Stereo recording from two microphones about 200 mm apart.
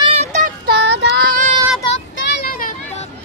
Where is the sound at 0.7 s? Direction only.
60° right (ahead or behind); by 1.5 s 45° right (ahead or behind).